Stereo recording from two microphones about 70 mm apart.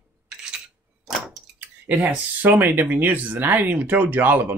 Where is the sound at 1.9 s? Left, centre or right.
Right.